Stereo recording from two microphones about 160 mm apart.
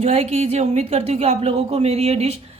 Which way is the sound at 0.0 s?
40° right (ahead or behind).